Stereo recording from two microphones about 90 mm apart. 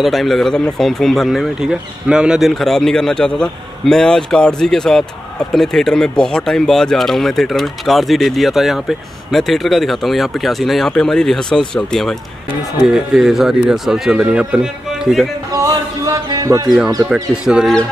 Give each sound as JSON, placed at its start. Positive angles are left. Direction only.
{"t": 0.0, "sound": "speech", "side_deg": 0}
{"t": 15.5, "sound": "a sound", "side_deg": -40}
{"t": 16.4, "sound": "speech", "side_deg": -40}
{"t": 17.1, "sound": "speech", "side_deg": -10}